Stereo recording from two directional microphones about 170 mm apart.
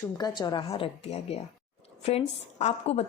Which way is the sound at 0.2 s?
25° left (ahead or behind).